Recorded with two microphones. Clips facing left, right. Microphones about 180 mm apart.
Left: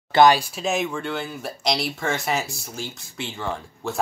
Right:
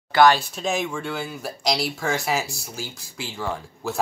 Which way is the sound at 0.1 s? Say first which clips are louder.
Left 1 dB; 15° left (ahead or behind).